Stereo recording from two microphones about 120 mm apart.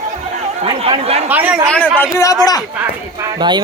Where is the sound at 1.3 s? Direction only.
15° right (ahead or behind).